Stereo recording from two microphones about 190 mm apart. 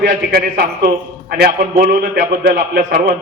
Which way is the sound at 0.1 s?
50° right (ahead or behind).